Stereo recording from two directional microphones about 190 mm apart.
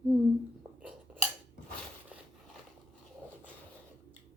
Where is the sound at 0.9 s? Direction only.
5° right (ahead or behind).